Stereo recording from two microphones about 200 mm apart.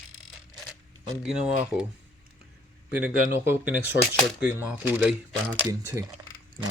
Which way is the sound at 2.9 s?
5° right (ahead or behind).